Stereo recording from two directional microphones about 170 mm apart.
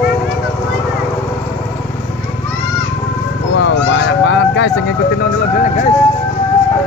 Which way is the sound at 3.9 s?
90° left.